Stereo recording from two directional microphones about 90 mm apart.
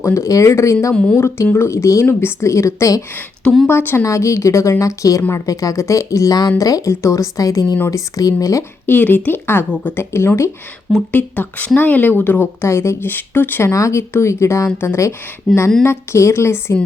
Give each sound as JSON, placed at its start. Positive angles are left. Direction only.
{"t": 0.0, "sound": "a woman's voice", "side_deg": 35}
{"t": 8.9, "sound": "a woman's voice", "side_deg": 20}
{"t": 11.1, "sound": "a woman's voice", "side_deg": 20}
{"t": 15.5, "sound": "speech", "side_deg": 0}
{"t": 15.8, "sound": "a woman's voice", "side_deg": 30}